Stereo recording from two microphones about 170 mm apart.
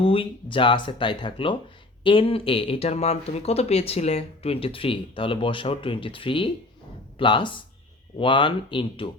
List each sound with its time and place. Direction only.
0.0 s speech: 30° left (ahead or behind)